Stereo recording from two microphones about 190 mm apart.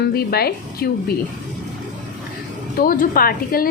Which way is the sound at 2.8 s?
45° left (ahead or behind).